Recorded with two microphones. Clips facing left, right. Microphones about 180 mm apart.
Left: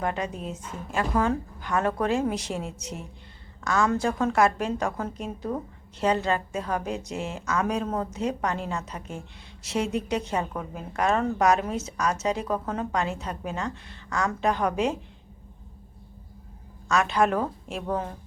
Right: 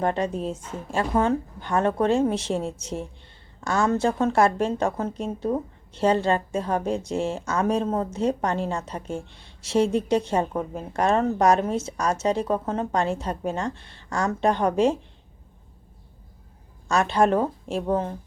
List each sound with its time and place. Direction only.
0.0 s a woman's voice: 30° right (ahead or behind)
16.9 s a woman's voice: 30° right (ahead or behind)